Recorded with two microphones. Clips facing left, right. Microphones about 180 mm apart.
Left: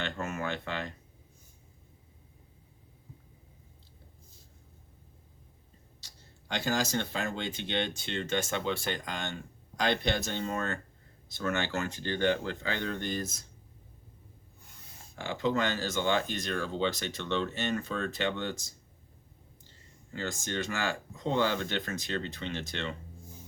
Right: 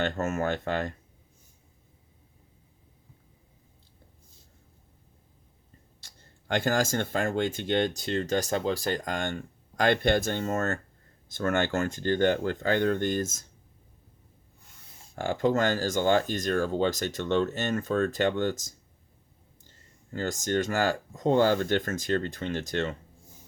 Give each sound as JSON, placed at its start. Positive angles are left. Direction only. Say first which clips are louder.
{"t": 0.0, "sound": "speech", "louder": "right 7 dB", "side_deg": -45}
{"t": 6.5, "sound": "speech", "louder": "right 5 dB", "side_deg": -50}
{"t": 15.1, "sound": "speech", "louder": "right 5 dB", "side_deg": -45}